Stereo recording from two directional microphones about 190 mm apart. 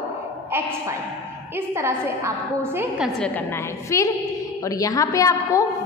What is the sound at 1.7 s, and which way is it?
A woman's voice, 15° right (ahead or behind).